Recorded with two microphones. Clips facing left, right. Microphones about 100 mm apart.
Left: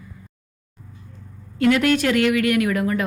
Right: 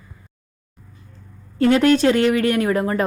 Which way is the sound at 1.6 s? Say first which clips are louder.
Right 3 dB; 30° right (ahead or behind).